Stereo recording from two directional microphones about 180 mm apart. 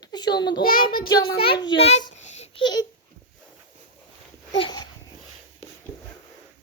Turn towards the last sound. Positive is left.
turn(degrees=25)  # may be behind; listen again after turning